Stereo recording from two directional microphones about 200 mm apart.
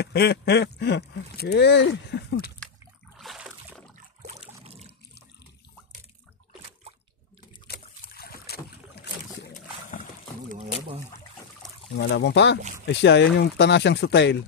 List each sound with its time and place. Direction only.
0.0 s speech: 55° left (ahead or behind)
2.6 s a sound: 5° left (ahead or behind)
4.3 s trickle: 30° right (ahead or behind)
7.6 s boat: 50° left (ahead or behind)
9.5 s boat: 40° left (ahead or behind)
11.9 s speech: 60° left (ahead or behind)